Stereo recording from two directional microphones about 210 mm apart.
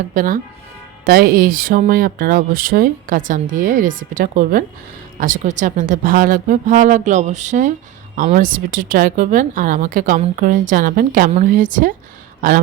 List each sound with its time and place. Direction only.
0.1 s speech: 40° right (ahead or behind)